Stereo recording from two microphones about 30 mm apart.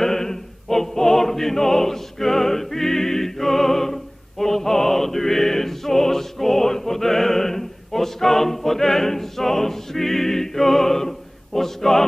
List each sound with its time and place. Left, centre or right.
0.0 s choir: centre